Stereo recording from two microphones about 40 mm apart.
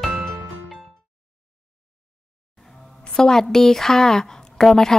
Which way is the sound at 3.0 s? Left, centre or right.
Centre.